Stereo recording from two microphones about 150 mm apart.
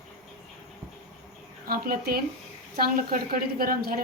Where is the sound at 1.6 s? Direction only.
80° right.